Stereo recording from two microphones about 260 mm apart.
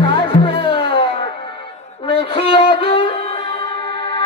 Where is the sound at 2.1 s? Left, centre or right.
Left.